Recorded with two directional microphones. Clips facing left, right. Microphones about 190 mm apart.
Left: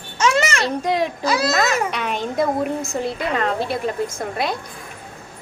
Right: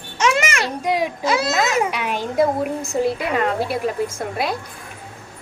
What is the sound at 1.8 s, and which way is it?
A woman's voice, 10° right (ahead or behind).